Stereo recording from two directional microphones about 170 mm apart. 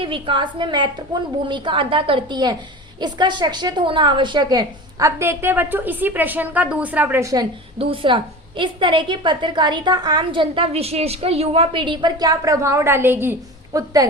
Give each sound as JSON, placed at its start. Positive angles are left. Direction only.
{"t": 0.0, "sound": "a woman's voice", "side_deg": -30}
{"t": 7.8, "sound": "a woman's voice", "side_deg": -30}